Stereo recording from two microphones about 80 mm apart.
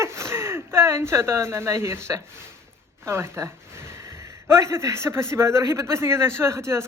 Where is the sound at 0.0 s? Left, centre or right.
Right.